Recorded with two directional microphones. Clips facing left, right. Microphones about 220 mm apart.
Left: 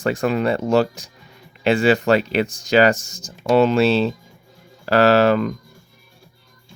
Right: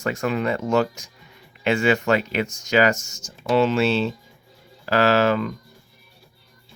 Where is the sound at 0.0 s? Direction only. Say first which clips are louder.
Left 4 dB; 35° left (ahead or behind).